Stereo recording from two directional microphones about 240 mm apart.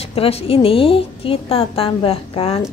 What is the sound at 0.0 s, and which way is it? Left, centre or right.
A woman's voice, left.